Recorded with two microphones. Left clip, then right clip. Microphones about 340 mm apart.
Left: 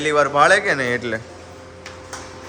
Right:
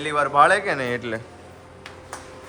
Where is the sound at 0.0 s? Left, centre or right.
Centre.